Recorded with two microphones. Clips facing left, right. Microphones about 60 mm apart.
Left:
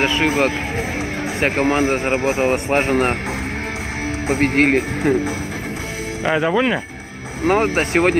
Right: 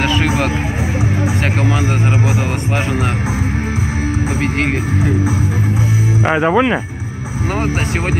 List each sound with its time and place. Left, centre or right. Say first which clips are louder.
0.0 s speech: right 1 dB; centre
1.6 s a man's voice: left 3 dB; left
4.3 s speech: left 6 dB; left
6.2 s speech: right 3 dB; right
7.4 s a man's voice: left 3 dB; left